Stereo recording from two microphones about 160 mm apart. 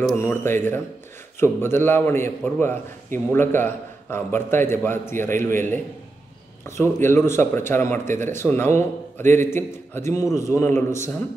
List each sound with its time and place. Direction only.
0.1 s a man's voice: 15° left (ahead or behind)